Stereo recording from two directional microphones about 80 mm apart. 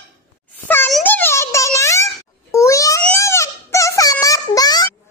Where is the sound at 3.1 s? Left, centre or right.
Left.